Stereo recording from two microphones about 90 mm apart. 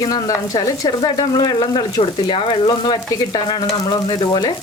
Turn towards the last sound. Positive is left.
turn(degrees=55)  # may be behind; listen again after turning